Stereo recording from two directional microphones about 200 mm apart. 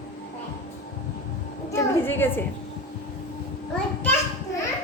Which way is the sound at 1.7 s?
10° left (ahead or behind).